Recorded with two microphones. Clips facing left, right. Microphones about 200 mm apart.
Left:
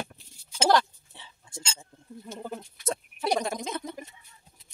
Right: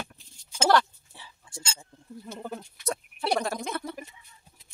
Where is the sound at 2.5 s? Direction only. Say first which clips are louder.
Left 1 dB; 20° left (ahead or behind).